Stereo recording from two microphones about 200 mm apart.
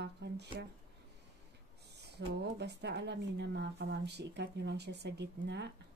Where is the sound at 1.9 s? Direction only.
55° right (ahead or behind).